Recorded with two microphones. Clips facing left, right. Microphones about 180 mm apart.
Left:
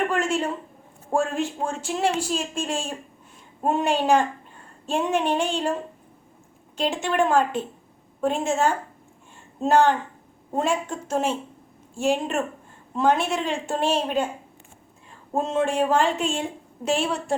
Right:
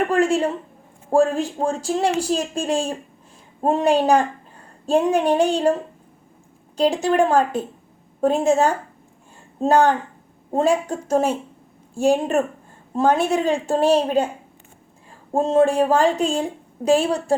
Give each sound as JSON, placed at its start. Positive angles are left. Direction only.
{"t": 0.1, "sound": "a woman's voice", "side_deg": -35}
{"t": 6.7, "sound": "a woman's voice", "side_deg": -35}
{"t": 15.3, "sound": "a woman's voice", "side_deg": -30}